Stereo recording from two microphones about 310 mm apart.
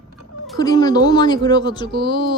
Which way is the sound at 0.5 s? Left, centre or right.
Centre.